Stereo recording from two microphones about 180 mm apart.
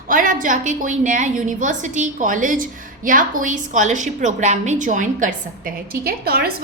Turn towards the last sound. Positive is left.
turn(degrees=-60)  # may be behind; listen again after turning